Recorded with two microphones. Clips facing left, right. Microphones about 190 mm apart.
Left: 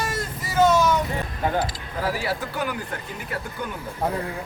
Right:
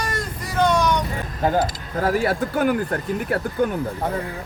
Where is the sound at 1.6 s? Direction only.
50° right (ahead or behind).